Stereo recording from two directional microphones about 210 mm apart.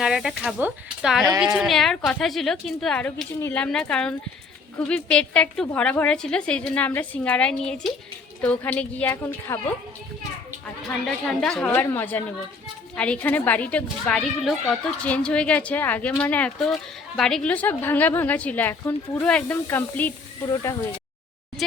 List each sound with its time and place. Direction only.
0.0 s a woman's voice: centre (ahead or behind)
11.3 s a woman's voice: 5° left (ahead or behind)